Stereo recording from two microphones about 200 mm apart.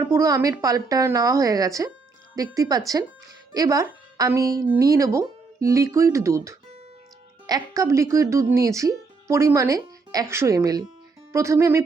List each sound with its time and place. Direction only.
0.0 s a woman's voice: 15° right (ahead or behind)